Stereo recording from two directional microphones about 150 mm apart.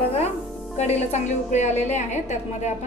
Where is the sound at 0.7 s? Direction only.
45° left (ahead or behind).